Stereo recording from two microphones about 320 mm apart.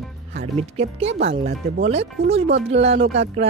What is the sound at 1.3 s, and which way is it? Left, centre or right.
Speech, centre.